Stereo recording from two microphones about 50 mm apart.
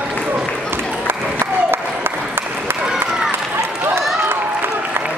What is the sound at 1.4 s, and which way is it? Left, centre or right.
Applause, right.